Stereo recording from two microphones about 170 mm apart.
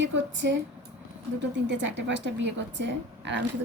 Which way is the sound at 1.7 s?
90° right.